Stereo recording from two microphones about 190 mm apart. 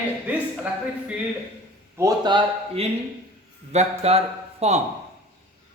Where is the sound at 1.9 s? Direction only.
20° right (ahead or behind); by 4.8 s 35° right (ahead or behind).